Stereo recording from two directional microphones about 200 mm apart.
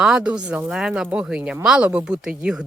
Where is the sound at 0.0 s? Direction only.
5° right (ahead or behind).